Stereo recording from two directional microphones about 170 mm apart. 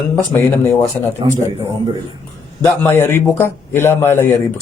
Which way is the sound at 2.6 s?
15° left (ahead or behind).